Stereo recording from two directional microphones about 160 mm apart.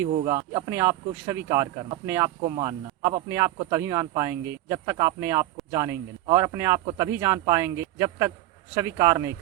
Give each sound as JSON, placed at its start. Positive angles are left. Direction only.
{"t": 0.3, "sound": "speech", "side_deg": -25}